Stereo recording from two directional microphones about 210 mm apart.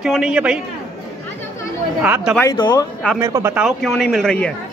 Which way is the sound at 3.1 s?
15° right (ahead or behind).